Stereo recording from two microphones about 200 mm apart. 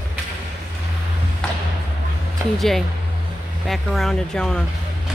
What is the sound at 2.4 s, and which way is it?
Speech, 10° right (ahead or behind).